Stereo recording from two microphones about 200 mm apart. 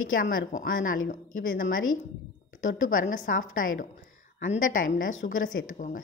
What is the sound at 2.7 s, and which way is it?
A woman's voice, 45° left (ahead or behind).